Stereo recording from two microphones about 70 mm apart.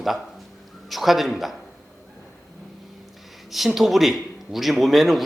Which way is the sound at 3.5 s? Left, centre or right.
Centre.